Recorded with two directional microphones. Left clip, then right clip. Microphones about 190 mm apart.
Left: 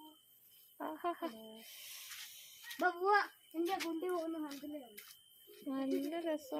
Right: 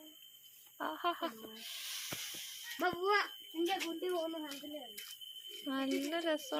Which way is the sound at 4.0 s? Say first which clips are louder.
Right 1 dB; 45° left (ahead or behind).